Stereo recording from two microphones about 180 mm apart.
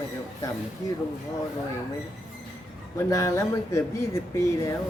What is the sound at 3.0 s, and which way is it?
Speech, 15° left (ahead or behind).